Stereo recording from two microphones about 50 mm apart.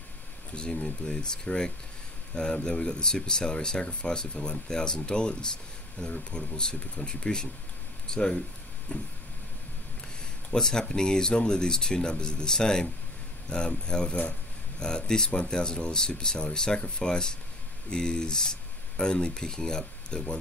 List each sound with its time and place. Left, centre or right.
0.6 s speech: centre
8.9 s vehicle: left
10.5 s speech: centre